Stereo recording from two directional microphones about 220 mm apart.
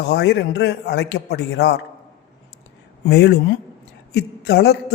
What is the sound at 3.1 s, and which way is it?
A man's voice, 50° left (ahead or behind).